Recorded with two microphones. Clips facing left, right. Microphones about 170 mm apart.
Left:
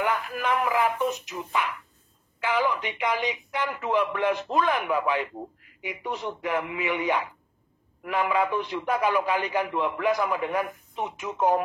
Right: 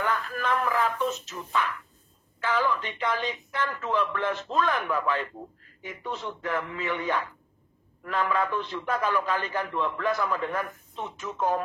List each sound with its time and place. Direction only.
0.0 s speech: 15° left (ahead or behind)